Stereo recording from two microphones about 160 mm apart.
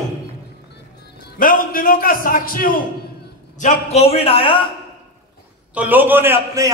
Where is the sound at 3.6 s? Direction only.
40° left (ahead or behind).